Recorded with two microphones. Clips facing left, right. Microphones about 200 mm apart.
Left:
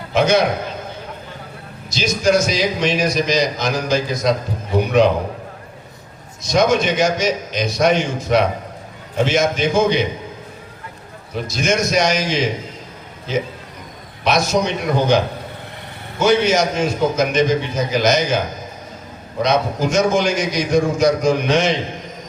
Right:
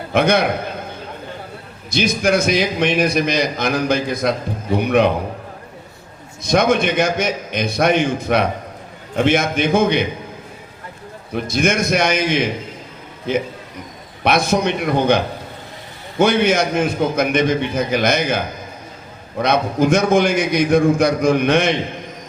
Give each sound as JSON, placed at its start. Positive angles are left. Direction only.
{"t": 0.1, "sound": "a man's voice", "side_deg": -55}
{"t": 1.9, "sound": "a man's voice", "side_deg": -55}
{"t": 6.4, "sound": "a man's voice", "side_deg": -55}
{"t": 11.4, "sound": "a man's voice", "side_deg": -55}